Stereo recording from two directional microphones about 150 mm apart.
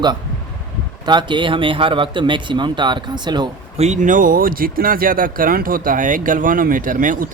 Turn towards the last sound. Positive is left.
turn(degrees=-65)  # may be behind; listen again after turning